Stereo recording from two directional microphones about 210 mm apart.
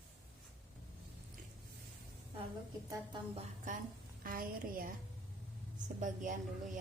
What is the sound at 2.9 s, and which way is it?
Speech, 20° right (ahead or behind).